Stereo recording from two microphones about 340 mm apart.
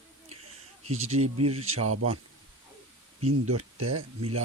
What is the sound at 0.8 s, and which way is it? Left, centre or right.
Speech, right.